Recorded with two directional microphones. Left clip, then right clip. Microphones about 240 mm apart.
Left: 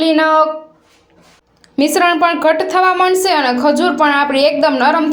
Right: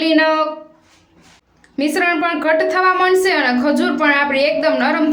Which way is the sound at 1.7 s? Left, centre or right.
Left.